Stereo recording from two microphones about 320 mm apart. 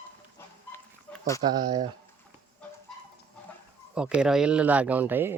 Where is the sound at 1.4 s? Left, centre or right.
Centre.